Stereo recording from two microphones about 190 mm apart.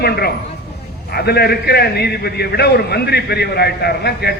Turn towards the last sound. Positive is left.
turn(degrees=60)  # may be behind; listen again after turning